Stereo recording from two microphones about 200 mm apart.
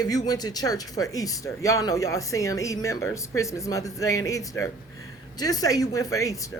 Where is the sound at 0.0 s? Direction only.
20° left (ahead or behind).